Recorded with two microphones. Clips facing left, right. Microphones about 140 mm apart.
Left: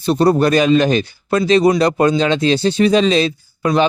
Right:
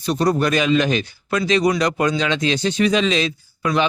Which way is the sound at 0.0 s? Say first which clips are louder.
Left 5 dB; 30° left (ahead or behind).